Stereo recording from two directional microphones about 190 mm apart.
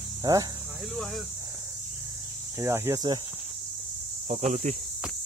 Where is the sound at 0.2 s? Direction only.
20° right (ahead or behind).